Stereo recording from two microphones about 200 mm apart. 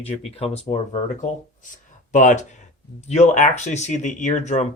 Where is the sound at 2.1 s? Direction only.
40° left (ahead or behind).